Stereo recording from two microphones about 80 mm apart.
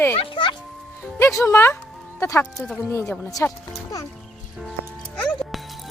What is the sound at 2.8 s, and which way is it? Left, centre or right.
Speech, left.